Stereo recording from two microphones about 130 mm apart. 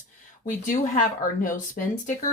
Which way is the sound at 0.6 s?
90° left.